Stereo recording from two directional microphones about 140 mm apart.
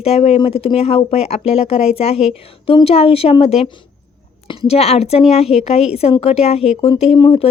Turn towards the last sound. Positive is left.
turn(degrees=40)  # may be behind; listen again after turning